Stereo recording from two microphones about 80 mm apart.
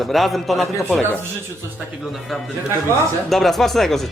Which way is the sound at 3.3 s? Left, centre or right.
Centre.